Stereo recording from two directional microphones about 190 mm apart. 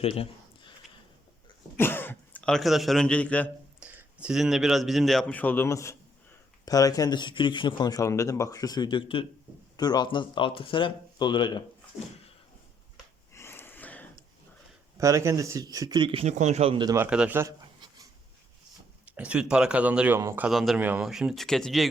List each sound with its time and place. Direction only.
0.0 s a sound: 30° left (ahead or behind)
1.8 s speech: 10° left (ahead or behind)
3.8 s speech: 5° right (ahead or behind); by 11.6 s 25° left (ahead or behind)
13.3 s gasp: 15° left (ahead or behind)
14.9 s a man's voice: 15° right (ahead or behind)
17.1 s speech: 5° right (ahead or behind)
19.1 s speech: 5° right (ahead or behind)
20.5 s speech: centre (ahead or behind)